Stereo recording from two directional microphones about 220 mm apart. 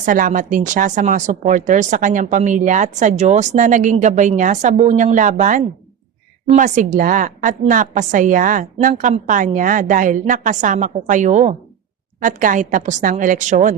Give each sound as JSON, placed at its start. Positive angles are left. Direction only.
{"t": 0.0, "sound": "speech", "side_deg": -35}